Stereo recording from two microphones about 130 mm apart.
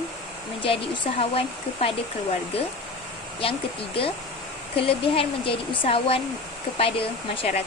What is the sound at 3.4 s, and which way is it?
Speech, 45° left (ahead or behind).